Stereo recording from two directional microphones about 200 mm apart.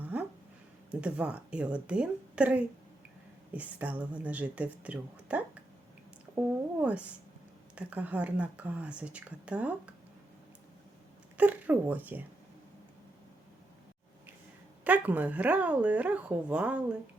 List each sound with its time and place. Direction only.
0.0 s a sound: 5° right (ahead or behind)
0.9 s a woman's voice: 5° right (ahead or behind)
7.8 s speech: 5° right (ahead or behind)
11.3 s speech: 10° right (ahead or behind)
14.8 s speech: 10° right (ahead or behind)